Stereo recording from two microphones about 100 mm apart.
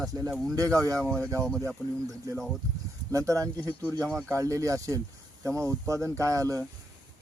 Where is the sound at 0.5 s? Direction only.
35° right (ahead or behind).